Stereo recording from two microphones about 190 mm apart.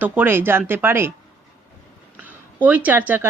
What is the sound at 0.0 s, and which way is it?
Speech, 10° right (ahead or behind).